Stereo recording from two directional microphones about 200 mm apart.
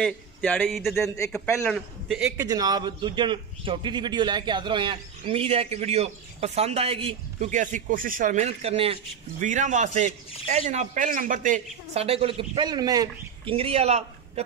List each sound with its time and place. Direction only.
0.0 s a man's voice: 5° left (ahead or behind)
2.2 s a man's voice: 15° right (ahead or behind)
13.6 s a man's voice: 30° right (ahead or behind)